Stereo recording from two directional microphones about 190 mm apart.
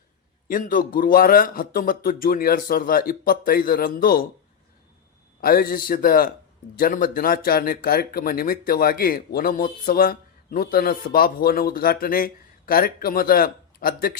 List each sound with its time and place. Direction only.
0.4 s speech: 45° left (ahead or behind)
5.4 s speech: 50° left (ahead or behind)